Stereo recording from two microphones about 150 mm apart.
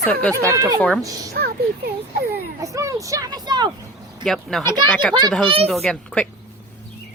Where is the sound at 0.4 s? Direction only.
20° right (ahead or behind).